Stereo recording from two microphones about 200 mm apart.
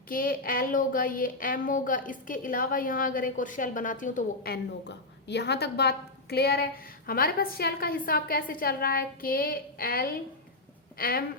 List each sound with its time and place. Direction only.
0.1 s a woman's voice: 45° left (ahead or behind)